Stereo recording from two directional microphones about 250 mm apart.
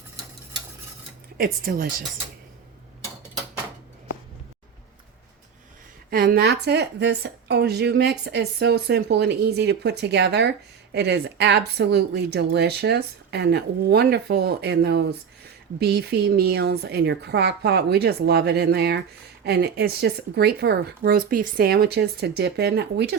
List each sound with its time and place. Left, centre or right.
1.4 s a woman's voice: right
6.1 s a woman's voice: right